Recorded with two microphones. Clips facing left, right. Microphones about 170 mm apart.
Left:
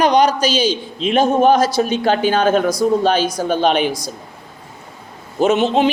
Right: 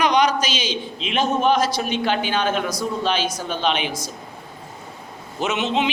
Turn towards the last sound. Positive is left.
turn(degrees=35)  # may be behind; listen again after turning